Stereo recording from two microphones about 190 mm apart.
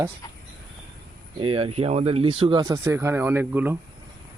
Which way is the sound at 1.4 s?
30° right (ahead or behind).